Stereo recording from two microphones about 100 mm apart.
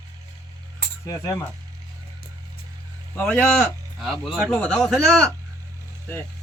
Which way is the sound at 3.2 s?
10° left (ahead or behind).